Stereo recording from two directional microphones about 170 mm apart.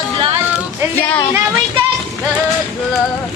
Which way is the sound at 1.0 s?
10° left (ahead or behind).